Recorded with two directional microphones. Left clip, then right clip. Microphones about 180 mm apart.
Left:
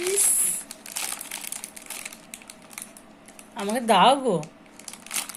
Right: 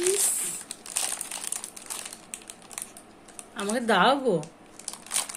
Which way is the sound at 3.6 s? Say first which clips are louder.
Left 4 dB; 5° right (ahead or behind).